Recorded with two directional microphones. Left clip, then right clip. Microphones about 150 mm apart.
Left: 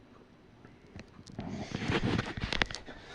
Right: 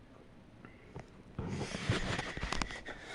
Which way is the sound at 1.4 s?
25° right (ahead or behind).